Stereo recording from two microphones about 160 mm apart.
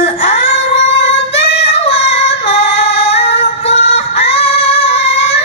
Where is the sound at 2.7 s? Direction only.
40° left (ahead or behind).